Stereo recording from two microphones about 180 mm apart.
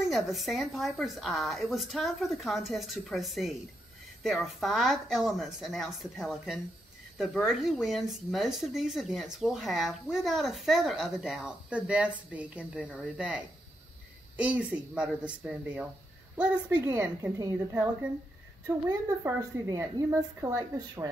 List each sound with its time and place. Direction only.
0.1 s speech: centre (ahead or behind)
18.9 s a woman's voice: 20° right (ahead or behind)